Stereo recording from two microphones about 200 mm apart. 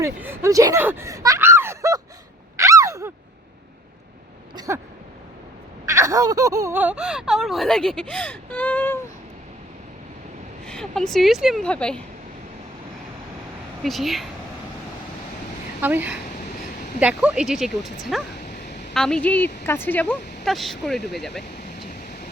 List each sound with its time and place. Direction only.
0.0 s speech: 10° right (ahead or behind)
2.6 s a sound: 15° right (ahead or behind)
4.5 s speech: 15° right (ahead or behind)
5.8 s speech: 15° right (ahead or behind); by 9.0 s 10° left (ahead or behind)
10.7 s speech: 5° left (ahead or behind)
13.8 s speech: centre (ahead or behind)
15.8 s speech: 10° right (ahead or behind)